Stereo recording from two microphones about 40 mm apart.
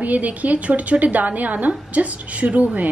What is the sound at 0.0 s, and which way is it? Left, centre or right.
A woman's voice, right.